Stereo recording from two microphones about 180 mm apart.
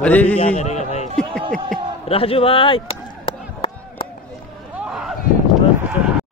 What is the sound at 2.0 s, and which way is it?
Chop, 30° left (ahead or behind).